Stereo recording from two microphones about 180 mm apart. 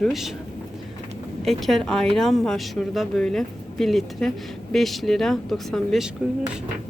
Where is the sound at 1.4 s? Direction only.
Centre (ahead or behind).